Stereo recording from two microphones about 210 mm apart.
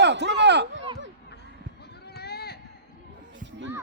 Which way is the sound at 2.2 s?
50° left (ahead or behind).